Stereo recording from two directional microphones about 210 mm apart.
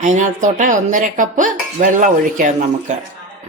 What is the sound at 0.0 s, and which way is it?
A woman's voice, 35° right (ahead or behind).